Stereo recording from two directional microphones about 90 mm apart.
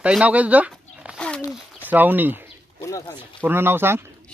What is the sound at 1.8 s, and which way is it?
Speech, 20° right (ahead or behind).